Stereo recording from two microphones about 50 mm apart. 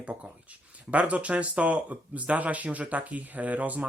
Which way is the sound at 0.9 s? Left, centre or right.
Right.